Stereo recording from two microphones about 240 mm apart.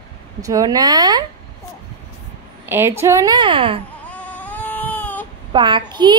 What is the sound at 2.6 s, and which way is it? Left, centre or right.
A woman's voice, centre.